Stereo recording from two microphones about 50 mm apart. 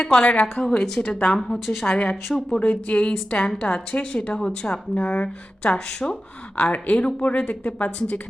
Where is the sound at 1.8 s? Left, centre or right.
Centre.